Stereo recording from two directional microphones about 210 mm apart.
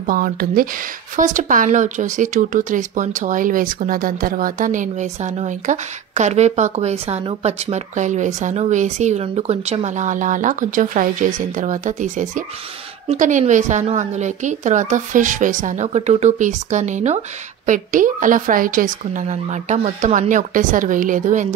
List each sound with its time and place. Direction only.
0.0 s speech: 45° right (ahead or behind)